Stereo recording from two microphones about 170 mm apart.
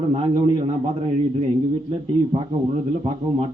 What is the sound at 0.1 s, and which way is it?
A man's voice, 35° right (ahead or behind).